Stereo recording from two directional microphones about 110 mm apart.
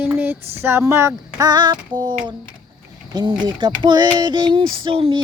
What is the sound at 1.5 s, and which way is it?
Child singing, 40° right (ahead or behind).